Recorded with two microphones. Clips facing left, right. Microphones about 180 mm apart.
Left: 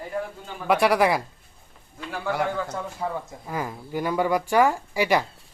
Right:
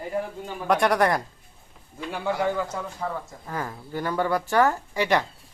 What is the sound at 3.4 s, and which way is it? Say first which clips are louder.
Speech: left 1 dB; 10° left (ahead or behind).